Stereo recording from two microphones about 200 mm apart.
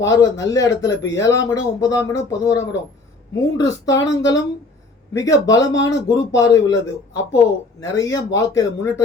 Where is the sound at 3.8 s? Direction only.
15° left (ahead or behind).